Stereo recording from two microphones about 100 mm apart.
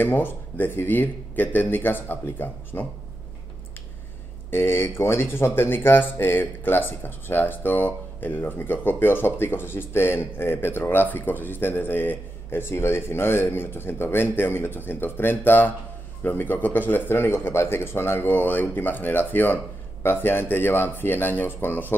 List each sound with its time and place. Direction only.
0.0 s speech: 20° left (ahead or behind)
4.5 s speech: 25° left (ahead or behind)